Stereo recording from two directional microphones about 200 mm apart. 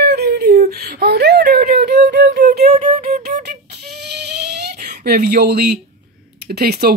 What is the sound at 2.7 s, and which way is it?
Flute, 40° right (ahead or behind).